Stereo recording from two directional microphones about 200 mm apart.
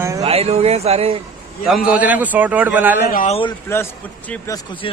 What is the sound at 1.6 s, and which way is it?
A man's voice, 5° right (ahead or behind).